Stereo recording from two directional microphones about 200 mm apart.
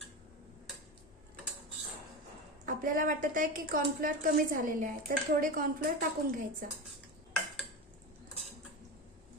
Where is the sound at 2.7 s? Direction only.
45° right (ahead or behind).